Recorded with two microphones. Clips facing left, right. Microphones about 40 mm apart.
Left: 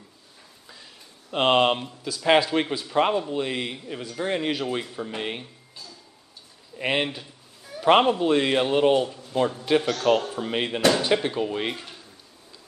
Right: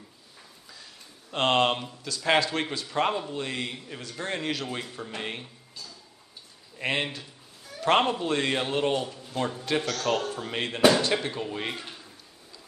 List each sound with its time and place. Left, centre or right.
1.3 s speech: centre
6.8 s a man's voice: centre
11.7 s speech: centre